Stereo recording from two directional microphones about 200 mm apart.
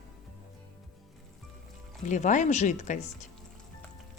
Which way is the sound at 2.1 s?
40° left (ahead or behind).